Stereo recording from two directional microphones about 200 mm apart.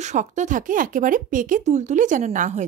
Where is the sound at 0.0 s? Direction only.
35° right (ahead or behind).